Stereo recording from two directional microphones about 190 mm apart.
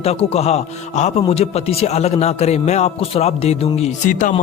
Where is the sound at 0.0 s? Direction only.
30° left (ahead or behind).